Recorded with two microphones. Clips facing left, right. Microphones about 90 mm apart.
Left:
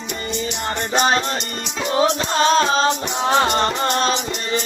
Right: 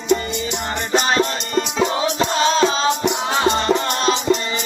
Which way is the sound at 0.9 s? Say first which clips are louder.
Right 1 dB; 40° left (ahead or behind).